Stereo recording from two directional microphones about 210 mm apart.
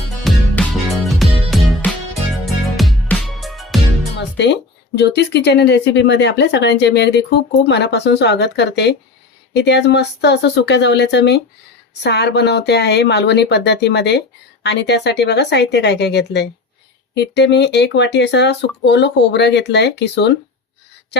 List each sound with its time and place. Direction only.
0.3 s music: 5° left (ahead or behind)
4.9 s speech: 50° left (ahead or behind)